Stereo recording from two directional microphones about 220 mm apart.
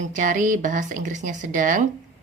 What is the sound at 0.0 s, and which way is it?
A woman's voice, 35° right (ahead or behind).